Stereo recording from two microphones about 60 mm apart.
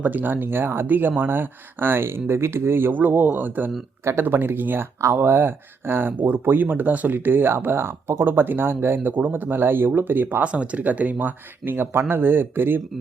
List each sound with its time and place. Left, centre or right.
0.0 s speech: right
4.9 s speech: right
5.2 s speech: right
10.4 s speech: right